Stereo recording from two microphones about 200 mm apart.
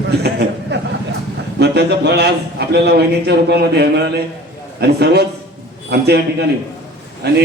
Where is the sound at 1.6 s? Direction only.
55° right (ahead or behind).